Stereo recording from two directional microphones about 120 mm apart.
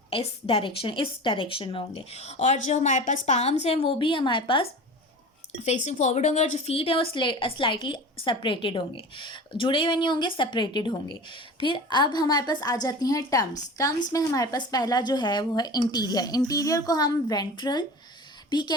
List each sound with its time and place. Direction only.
0.1 s a woman's voice: 50° left (ahead or behind); by 3.5 s 70° left (ahead or behind)
3.6 s a woman's voice: 55° left (ahead or behind)
5.5 s speech: 70° left (ahead or behind); by 6.6 s 90° left
6.7 s a woman's voice: 55° left (ahead or behind); by 17.8 s 35° left (ahead or behind)